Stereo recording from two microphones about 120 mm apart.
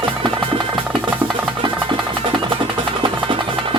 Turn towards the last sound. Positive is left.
turn(degrees=-45)  # may be behind; listen again after turning